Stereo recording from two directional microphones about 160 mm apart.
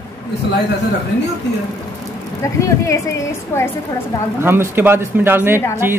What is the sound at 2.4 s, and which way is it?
A woman's voice, 20° left (ahead or behind).